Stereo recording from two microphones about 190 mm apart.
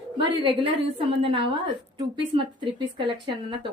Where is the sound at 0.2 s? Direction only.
25° right (ahead or behind).